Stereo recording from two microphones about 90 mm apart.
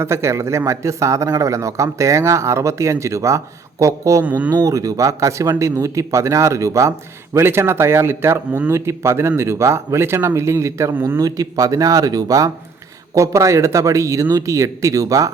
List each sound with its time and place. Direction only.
0.0 s speech: 30° right (ahead or behind)
4.2 s speech: 20° right (ahead or behind)
4.5 s speech: 40° right (ahead or behind); by 11.2 s 25° right (ahead or behind)
11.2 s speech: 45° right (ahead or behind)